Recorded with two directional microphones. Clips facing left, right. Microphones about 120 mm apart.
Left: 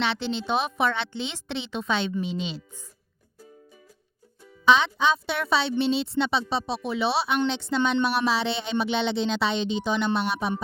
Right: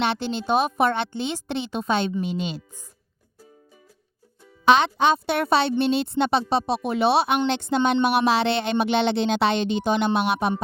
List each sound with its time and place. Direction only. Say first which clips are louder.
0.0 s a woman's voice: right 3 dB; 50° right (ahead or behind)
4.6 s speech: right 3 dB; 55° right (ahead or behind)